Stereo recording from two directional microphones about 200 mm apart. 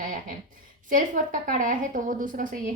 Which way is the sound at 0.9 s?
40° right (ahead or behind).